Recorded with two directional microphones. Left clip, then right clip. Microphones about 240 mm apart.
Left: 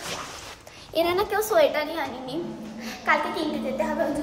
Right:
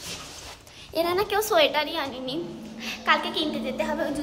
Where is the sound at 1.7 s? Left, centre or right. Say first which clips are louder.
Right 1 dB; centre.